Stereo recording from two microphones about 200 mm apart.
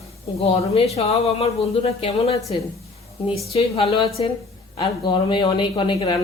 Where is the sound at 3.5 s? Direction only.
30° left (ahead or behind).